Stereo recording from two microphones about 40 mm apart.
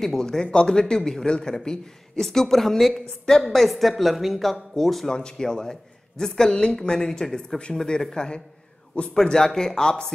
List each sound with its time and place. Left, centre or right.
0.0 s a man's voice: centre
3.5 s speech: centre
5.1 s a man's voice: centre